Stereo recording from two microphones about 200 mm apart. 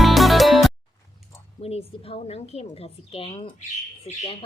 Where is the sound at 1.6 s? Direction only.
30° left (ahead or behind).